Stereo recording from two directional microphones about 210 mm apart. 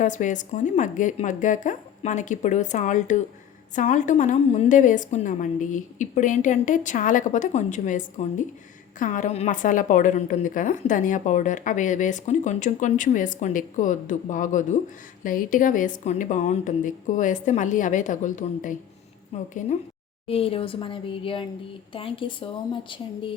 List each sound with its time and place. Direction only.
0.0 s a woman's voice: 35° left (ahead or behind)